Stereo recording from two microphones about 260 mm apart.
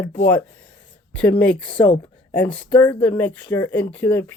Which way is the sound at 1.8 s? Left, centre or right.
Centre.